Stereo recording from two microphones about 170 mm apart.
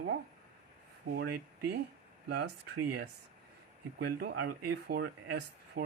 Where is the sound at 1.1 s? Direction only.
75° right (ahead or behind).